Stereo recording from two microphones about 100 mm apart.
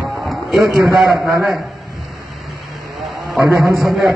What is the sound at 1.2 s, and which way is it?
Speech, 30° right (ahead or behind).